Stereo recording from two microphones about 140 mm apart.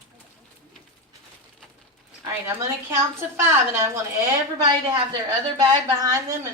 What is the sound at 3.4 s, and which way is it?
A woman's voice, 20° right (ahead or behind).